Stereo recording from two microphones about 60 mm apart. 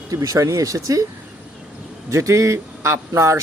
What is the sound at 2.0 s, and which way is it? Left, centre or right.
Speech, right.